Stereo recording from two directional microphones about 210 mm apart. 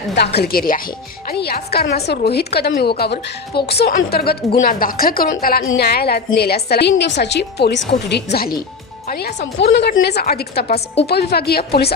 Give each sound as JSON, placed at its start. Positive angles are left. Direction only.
{"t": 0.1, "sound": "a woman's voice", "side_deg": 50}